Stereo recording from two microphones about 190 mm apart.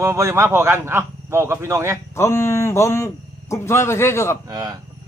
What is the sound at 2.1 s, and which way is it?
A man's voice, 15° left (ahead or behind).